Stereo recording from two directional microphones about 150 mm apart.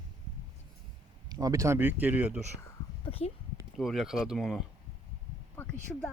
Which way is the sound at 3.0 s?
40° left (ahead or behind).